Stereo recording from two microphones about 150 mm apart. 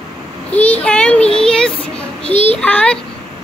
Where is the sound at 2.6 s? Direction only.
10° left (ahead or behind).